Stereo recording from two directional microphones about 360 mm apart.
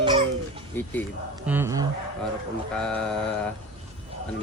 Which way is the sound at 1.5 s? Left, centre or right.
Centre.